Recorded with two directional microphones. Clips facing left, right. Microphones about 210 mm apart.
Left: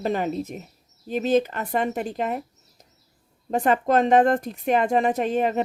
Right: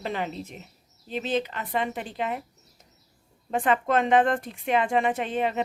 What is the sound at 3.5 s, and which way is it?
A woman's voice, 40° left (ahead or behind).